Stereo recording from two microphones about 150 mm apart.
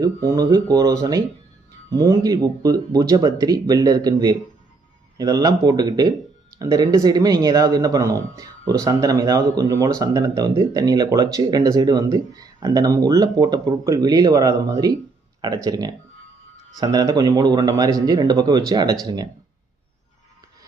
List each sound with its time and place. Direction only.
0.0 s speech: 25° right (ahead or behind)